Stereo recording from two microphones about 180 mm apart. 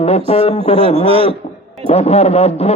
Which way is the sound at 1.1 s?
30° right (ahead or behind).